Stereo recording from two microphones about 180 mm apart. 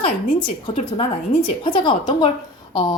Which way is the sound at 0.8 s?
40° left (ahead or behind).